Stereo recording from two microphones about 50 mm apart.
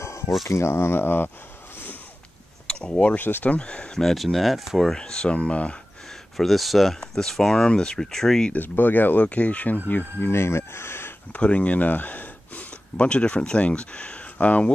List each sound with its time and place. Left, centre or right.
0.0 s a sound: left
0.5 s speech: left
2.6 s speech: centre
3.2 s speech: left
3.4 s speech: left
4.0 s speech: centre
4.9 s speech: centre
6.3 s speech: centre
8.5 s speech: left
10.3 s speech: left
11.3 s speech: left
12.9 s speech: left